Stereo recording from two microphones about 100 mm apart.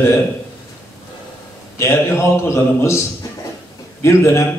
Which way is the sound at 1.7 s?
25° left (ahead or behind).